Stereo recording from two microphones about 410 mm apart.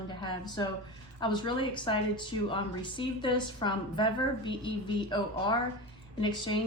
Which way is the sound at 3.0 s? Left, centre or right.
Centre.